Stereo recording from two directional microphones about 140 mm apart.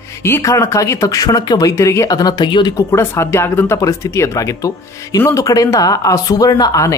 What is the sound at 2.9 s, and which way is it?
Speech, 20° left (ahead or behind).